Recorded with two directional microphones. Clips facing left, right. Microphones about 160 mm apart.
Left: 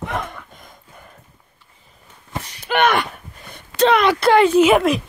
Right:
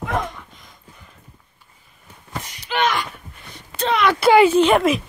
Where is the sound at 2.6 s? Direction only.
60° left (ahead or behind).